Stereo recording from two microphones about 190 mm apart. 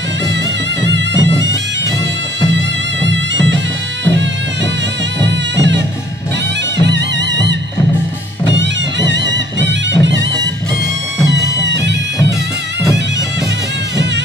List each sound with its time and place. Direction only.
0.8 s bagpipes: 70° right (ahead or behind)
2.5 s music: 70° right (ahead or behind)
5.2 s music: 65° right (ahead or behind)
8.5 s music: 70° right (ahead or behind)
11.6 s music: 65° right (ahead or behind)